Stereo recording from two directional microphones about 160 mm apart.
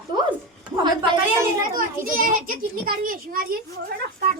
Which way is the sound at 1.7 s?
60° right (ahead or behind).